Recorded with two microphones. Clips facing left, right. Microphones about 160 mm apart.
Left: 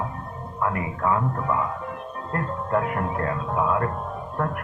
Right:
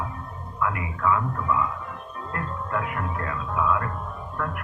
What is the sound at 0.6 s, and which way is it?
Speech, 35° left (ahead or behind).